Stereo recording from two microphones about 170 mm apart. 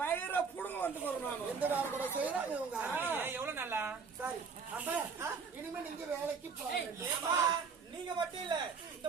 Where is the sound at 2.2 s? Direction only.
10° right (ahead or behind).